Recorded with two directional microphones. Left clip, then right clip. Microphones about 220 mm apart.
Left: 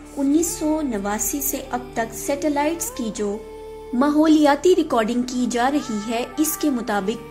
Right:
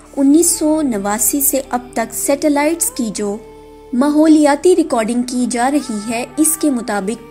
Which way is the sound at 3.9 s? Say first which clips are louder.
Right 5 dB; 5° right (ahead or behind).